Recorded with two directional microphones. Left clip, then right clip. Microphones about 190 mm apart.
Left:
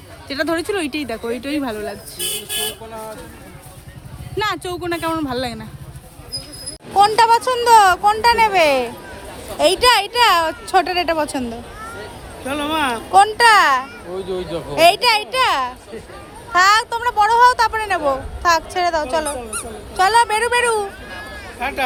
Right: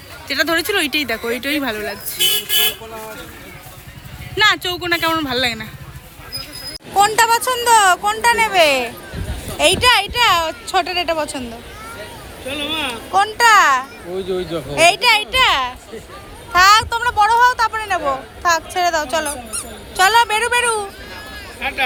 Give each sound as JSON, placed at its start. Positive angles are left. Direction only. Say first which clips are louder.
{"t": 0.3, "sound": "speech", "louder": "right 3 dB", "side_deg": 15}
{"t": 4.4, "sound": "speech", "louder": "right 7 dB", "side_deg": 10}
{"t": 6.9, "sound": "speech", "louder": "left 1 dB", "side_deg": 10}
{"t": 12.5, "sound": "speech", "louder": "left 3 dB", "side_deg": 45}
{"t": 13.1, "sound": "speech", "louder": "left 1 dB", "side_deg": 25}
{"t": 21.6, "sound": "speech", "louder": "right 1 dB", "side_deg": 40}